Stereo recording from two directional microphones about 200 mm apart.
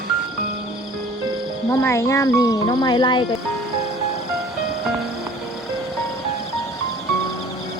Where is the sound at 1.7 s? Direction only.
15° left (ahead or behind).